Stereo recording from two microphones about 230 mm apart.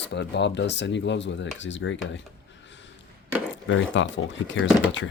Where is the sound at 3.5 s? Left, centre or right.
Left.